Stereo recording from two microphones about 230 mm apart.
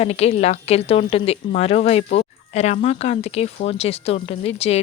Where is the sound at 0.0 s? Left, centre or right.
Left.